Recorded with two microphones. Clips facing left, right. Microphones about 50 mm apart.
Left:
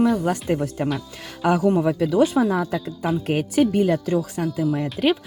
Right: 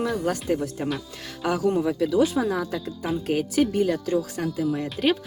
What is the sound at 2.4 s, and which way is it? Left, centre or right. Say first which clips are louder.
Speech: left 4 dB; centre.